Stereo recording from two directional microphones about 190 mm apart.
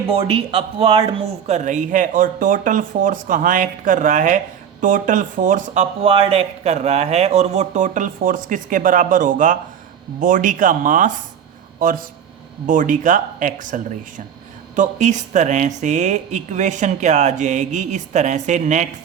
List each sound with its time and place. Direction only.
0.1 s speech: 30° right (ahead or behind)